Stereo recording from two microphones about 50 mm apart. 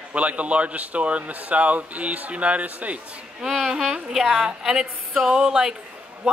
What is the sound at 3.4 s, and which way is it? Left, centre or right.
Speech, centre.